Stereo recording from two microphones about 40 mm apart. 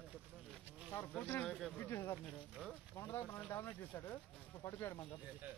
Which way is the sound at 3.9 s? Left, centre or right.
Left.